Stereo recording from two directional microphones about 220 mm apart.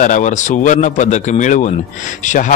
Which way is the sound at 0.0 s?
35° left (ahead or behind).